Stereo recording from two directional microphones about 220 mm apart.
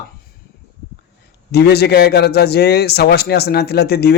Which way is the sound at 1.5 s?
45° left (ahead or behind).